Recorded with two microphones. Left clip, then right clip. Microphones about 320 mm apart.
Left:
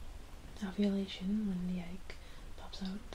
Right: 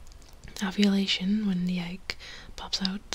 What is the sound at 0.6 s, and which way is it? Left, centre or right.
Speech, right.